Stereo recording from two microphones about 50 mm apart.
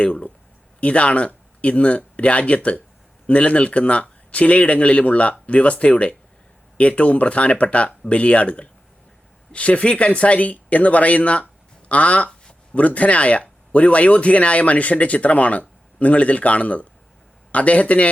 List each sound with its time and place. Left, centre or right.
0.0 s speech: left